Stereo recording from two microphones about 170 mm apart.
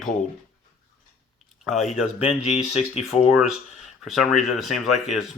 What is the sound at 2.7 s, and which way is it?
Speech, 40° left (ahead or behind).